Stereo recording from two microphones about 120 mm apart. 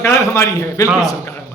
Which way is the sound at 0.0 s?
20° left (ahead or behind).